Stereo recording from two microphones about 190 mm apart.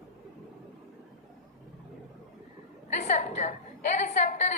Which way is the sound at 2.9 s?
40° left (ahead or behind).